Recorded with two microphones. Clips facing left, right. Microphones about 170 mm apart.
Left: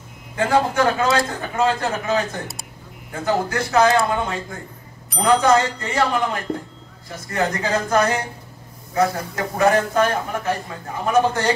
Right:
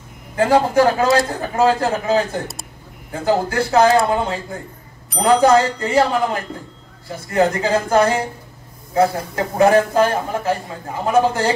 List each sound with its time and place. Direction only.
0.4 s a man's voice: 30° right (ahead or behind)